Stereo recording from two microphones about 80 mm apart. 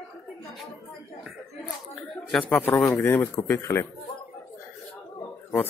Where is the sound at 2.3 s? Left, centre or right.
Centre; by 3.8 s left.